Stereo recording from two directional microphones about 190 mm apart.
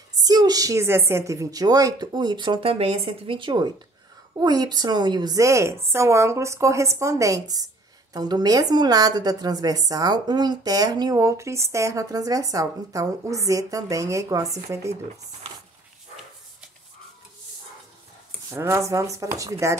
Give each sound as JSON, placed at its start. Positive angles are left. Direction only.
{"t": 0.2, "sound": "a woman's voice", "side_deg": -20}
{"t": 18.5, "sound": "a woman's voice", "side_deg": -15}